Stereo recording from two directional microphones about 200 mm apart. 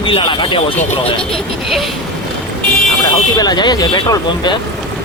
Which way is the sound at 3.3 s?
20° left (ahead or behind).